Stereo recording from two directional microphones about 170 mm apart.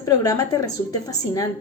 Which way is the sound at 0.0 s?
20° left (ahead or behind).